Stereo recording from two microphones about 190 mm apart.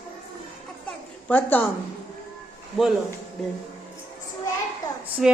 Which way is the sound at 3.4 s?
Centre (ahead or behind).